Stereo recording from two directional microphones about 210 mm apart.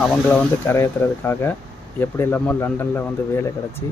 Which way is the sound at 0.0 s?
5° left (ahead or behind).